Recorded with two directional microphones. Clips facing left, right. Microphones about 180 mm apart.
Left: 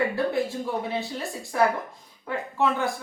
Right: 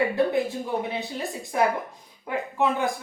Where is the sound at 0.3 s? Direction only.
20° right (ahead or behind).